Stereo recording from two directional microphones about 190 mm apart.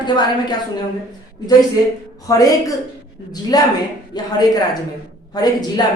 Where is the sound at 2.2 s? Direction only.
20° left (ahead or behind).